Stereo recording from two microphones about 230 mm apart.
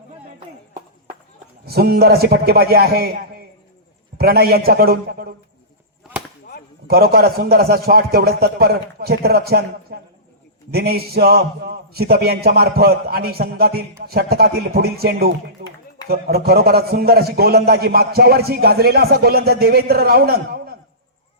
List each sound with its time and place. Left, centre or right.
1.6 s a man's voice: right
4.2 s a man's voice: right
6.8 s a man's voice: right